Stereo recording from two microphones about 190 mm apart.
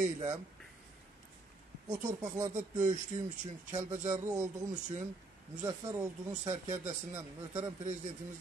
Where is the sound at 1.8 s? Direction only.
20° right (ahead or behind).